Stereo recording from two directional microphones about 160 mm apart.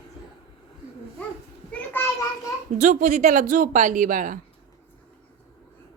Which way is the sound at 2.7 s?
50° right (ahead or behind).